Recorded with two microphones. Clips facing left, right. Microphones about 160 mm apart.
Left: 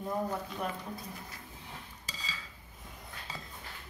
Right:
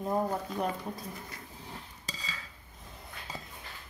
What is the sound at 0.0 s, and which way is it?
Speech, 35° right (ahead or behind).